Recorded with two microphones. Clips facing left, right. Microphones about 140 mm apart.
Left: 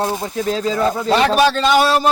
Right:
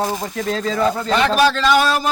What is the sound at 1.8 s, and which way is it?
Speech, 30° left (ahead or behind).